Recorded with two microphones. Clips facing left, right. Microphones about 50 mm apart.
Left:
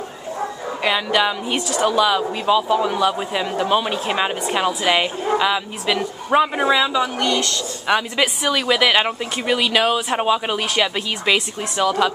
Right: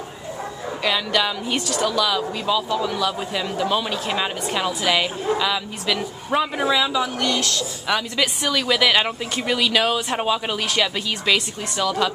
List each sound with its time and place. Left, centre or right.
0.8 s a man's voice: centre
1.9 s a man's voice: left; by 7.6 s centre
7.8 s a woman's voice: centre